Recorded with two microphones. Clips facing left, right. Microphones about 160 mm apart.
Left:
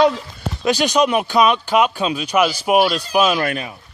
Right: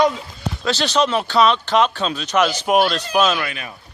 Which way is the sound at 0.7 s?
15° left (ahead or behind).